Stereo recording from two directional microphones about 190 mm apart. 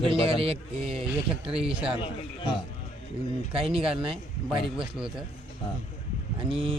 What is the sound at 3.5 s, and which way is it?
Speech, 30° right (ahead or behind).